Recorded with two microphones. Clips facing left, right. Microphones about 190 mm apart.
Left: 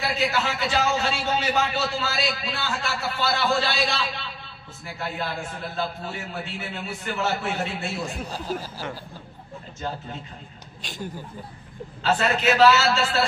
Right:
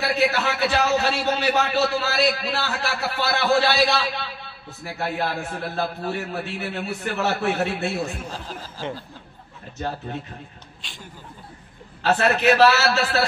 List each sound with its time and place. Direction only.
0.0 s a man's voice: 65° right (ahead or behind)
8.3 s speech: 10° left (ahead or behind)
10.8 s speech: 40° left (ahead or behind)
12.0 s a man's voice: 65° right (ahead or behind)